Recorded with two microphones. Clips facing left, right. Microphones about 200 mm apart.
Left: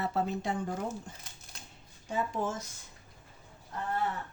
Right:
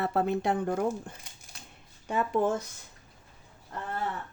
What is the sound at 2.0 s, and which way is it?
Speech, 65° right (ahead or behind).